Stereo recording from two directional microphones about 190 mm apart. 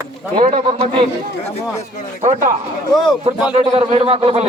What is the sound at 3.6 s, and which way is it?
Speech, 30° right (ahead or behind).